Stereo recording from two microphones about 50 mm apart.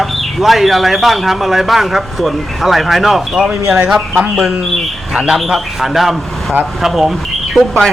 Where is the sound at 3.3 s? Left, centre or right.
Centre.